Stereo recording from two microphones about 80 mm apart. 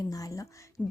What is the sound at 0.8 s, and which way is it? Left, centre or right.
Speech, centre.